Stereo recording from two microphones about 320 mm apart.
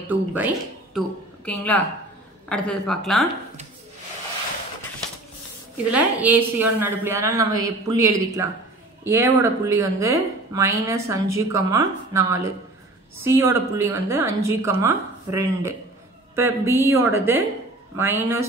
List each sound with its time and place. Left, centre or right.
0.1 s a woman's voice: centre
5.9 s a woman's voice: centre